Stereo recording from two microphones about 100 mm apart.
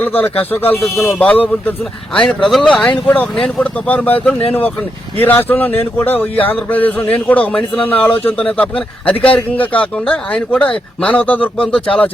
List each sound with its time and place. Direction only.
0.0 s speech: 20° left (ahead or behind); by 2.8 s centre (ahead or behind)
3.1 s speech: 10° left (ahead or behind)